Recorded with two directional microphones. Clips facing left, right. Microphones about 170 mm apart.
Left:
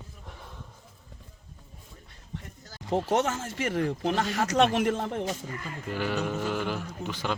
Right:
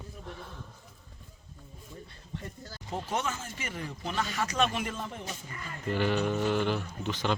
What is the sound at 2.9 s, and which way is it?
Speech, 75° left (ahead or behind).